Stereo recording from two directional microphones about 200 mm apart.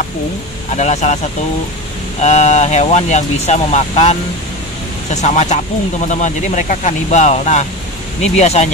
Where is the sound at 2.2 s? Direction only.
35° left (ahead or behind).